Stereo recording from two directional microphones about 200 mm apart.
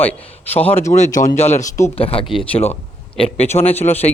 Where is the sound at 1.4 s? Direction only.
35° left (ahead or behind).